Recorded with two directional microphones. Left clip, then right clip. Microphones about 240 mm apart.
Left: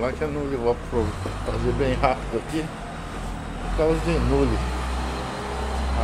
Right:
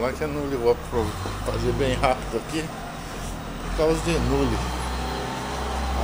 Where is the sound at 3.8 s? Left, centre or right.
Centre.